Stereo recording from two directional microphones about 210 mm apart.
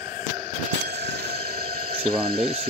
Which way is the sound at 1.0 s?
45° right (ahead or behind).